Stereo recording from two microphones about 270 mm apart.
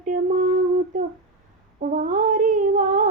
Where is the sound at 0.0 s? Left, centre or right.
Right.